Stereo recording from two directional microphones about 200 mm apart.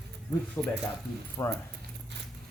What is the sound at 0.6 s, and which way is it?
Speech, 5° left (ahead or behind).